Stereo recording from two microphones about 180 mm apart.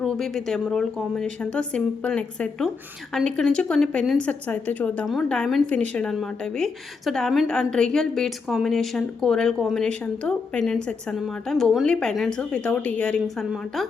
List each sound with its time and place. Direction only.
0.0 s a woman's voice: centre (ahead or behind)